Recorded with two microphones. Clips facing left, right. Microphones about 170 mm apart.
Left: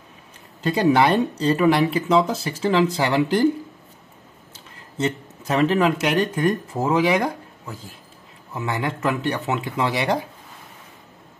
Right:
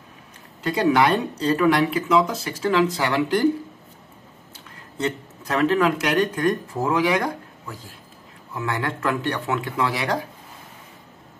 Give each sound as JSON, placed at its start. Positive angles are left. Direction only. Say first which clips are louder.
{"t": 0.7, "sound": "speech", "louder": "left 1 dB", "side_deg": 25}
{"t": 4.9, "sound": "speech", "louder": "left 2 dB", "side_deg": 25}
{"t": 8.5, "sound": "speech", "louder": "left 1 dB", "side_deg": 20}